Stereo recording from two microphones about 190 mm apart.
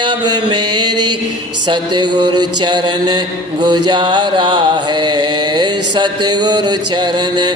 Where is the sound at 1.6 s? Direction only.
25° right (ahead or behind).